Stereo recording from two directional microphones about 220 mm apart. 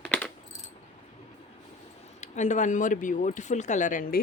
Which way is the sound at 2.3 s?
35° left (ahead or behind).